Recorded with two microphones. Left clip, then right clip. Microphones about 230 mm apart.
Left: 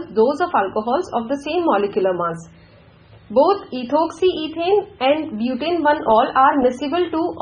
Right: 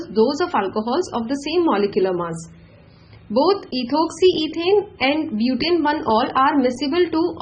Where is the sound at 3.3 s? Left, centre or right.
Right.